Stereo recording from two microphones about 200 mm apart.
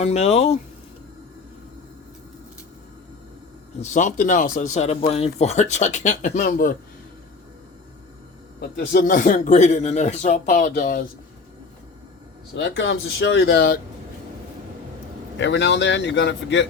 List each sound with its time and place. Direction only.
0.0 s speech: 35° left (ahead or behind)
3.8 s speech: 40° left (ahead or behind)
8.7 s speech: 50° left (ahead or behind)
12.5 s a man's voice: 65° left (ahead or behind)
15.4 s a man's voice: 60° left (ahead or behind)